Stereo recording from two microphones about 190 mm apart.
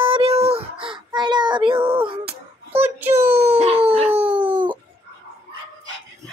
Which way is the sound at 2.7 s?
10° right (ahead or behind).